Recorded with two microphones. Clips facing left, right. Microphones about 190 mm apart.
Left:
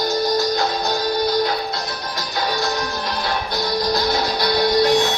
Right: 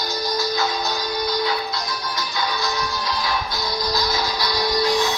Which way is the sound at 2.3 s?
45° left (ahead or behind).